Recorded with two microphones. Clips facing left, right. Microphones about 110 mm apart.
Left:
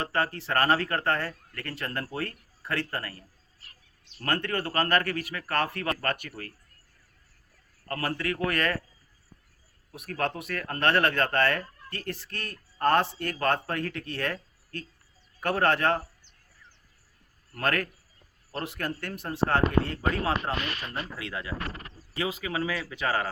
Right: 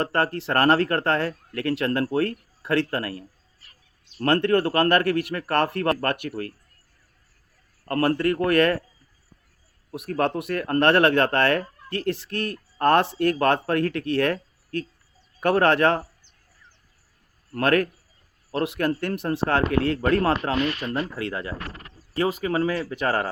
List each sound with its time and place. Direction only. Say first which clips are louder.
0.0 s speech: right 5 dB; 65° right (ahead or behind)
4.3 s speech: right 9 dB; 65° right (ahead or behind)
7.9 s speech: right 9 dB; 55° right (ahead or behind)
10.1 s speech: right 7 dB; 60° right (ahead or behind); by 16.0 s 75° right (ahead or behind)
17.6 s speech: right 8 dB; 60° right (ahead or behind)
18.5 s speech: right 9 dB; 75° right (ahead or behind)
21.2 s speech: right 5 dB; 50° right (ahead or behind)